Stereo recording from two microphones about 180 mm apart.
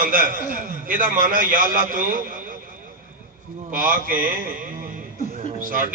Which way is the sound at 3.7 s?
50° right (ahead or behind).